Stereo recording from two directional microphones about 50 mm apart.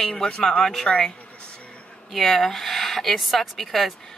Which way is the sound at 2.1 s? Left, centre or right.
Centre.